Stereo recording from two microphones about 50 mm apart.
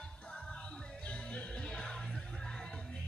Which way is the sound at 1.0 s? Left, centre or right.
Left.